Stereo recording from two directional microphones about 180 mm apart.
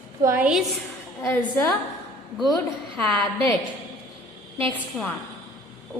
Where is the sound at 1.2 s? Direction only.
10° left (ahead or behind).